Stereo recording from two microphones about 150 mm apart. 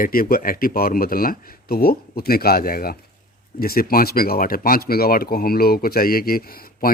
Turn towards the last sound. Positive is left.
turn(degrees=80)